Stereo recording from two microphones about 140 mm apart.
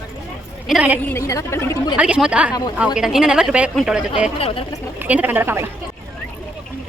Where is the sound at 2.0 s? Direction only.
10° right (ahead or behind).